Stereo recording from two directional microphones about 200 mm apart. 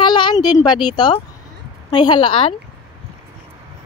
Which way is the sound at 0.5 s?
20° left (ahead or behind).